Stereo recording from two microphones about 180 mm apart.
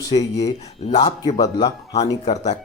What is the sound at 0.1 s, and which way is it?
Speech, 20° left (ahead or behind).